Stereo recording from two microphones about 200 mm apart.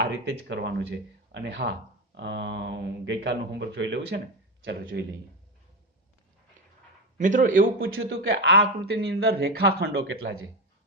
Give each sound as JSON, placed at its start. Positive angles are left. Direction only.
{"t": 0.0, "sound": "speech", "side_deg": -60}
{"t": 7.2, "sound": "a man's voice", "side_deg": -40}
{"t": 7.8, "sound": "a man's voice", "side_deg": -90}
{"t": 8.1, "sound": "speech", "side_deg": -55}